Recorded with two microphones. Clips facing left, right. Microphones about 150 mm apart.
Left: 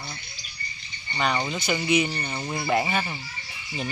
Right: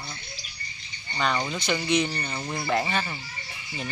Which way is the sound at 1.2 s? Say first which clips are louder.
Left 1 dB; 10° left (ahead or behind).